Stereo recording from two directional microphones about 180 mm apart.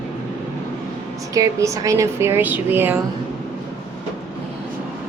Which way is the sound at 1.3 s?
15° right (ahead or behind).